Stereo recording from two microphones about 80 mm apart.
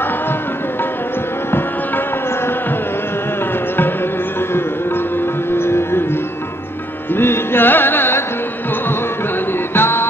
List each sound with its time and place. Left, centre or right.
5.5 s music: left
7.2 s music: left
9.5 s music: left